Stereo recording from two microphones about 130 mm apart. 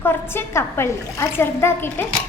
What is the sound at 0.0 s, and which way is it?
A child's voice, 20° left (ahead or behind).